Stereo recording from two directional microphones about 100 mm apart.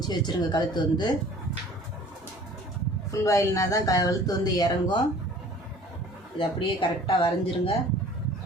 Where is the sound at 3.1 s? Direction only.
30° left (ahead or behind).